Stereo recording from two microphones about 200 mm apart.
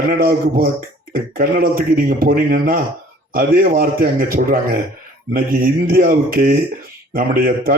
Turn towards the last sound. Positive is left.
turn(degrees=-45)  # may be behind; listen again after turning